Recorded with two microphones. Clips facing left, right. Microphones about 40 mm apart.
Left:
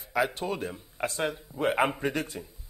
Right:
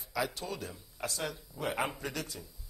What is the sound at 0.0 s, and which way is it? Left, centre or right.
A man's voice, left.